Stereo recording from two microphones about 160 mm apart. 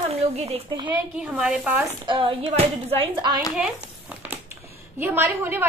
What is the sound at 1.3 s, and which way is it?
Speech, 10° right (ahead or behind).